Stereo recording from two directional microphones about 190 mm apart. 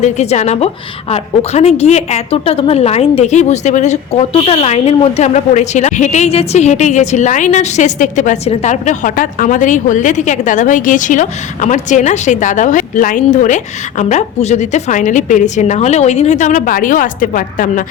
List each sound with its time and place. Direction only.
0.0 s a woman's voice: 35° left (ahead or behind)